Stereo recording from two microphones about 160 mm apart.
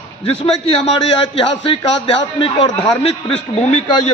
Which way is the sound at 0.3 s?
35° left (ahead or behind).